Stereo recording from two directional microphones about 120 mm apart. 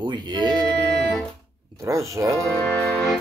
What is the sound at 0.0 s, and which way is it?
Speech, 40° right (ahead or behind).